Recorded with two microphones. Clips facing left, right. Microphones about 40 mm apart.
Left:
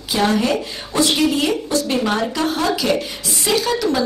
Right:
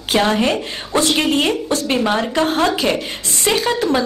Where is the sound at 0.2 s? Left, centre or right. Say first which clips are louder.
Left 1 dB; right.